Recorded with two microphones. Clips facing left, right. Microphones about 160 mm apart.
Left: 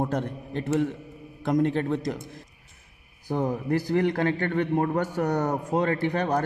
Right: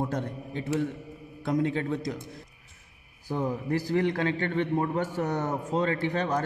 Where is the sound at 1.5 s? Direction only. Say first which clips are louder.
Left 3 dB; 60° left (ahead or behind).